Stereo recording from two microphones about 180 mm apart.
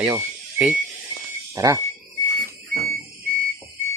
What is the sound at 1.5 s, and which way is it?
Speech, 20° right (ahead or behind).